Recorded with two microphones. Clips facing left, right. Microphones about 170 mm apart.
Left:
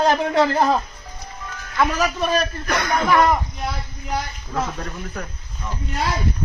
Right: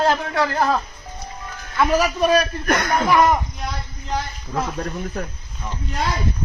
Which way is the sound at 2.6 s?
55° right (ahead or behind).